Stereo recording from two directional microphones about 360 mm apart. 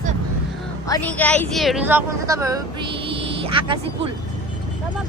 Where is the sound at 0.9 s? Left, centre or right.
Centre.